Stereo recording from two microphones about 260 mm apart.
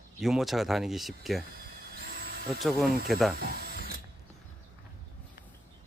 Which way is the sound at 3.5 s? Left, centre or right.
Right.